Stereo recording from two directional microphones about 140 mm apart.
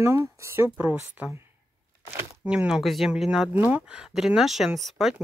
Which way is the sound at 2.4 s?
5° right (ahead or behind).